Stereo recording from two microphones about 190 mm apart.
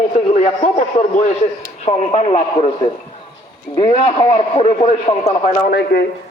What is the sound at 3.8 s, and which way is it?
Speech, 35° left (ahead or behind).